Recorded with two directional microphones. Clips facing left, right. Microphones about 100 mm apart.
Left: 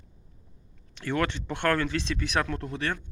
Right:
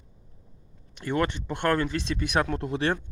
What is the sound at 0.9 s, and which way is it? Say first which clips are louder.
Speech: right 1 dB; 15° right (ahead or behind).